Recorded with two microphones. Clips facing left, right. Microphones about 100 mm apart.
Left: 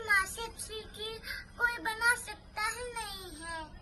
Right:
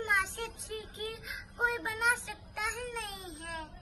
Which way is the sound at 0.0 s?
10° left (ahead or behind).